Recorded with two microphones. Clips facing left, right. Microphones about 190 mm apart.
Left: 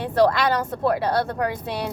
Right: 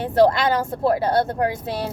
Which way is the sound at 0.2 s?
25° right (ahead or behind).